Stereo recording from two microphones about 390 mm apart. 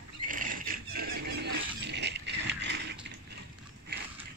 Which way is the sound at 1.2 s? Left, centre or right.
Right.